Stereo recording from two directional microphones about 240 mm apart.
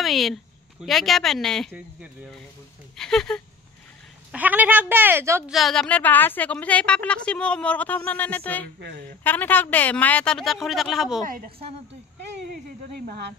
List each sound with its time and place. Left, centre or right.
0.0 s a woman's voice: centre
5.5 s a woman's voice: centre